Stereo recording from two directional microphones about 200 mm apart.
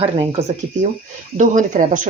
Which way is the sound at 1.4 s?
40° right (ahead or behind).